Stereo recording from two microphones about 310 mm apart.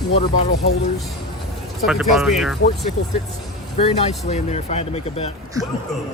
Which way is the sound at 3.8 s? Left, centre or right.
Centre.